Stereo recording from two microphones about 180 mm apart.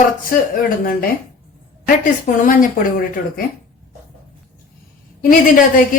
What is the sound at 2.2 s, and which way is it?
A woman's voice, 50° left (ahead or behind).